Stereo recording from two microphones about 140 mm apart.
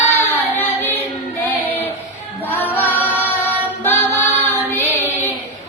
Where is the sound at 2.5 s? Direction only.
15° left (ahead or behind).